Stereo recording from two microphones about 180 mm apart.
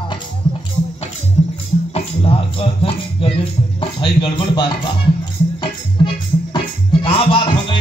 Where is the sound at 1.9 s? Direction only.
30° left (ahead or behind).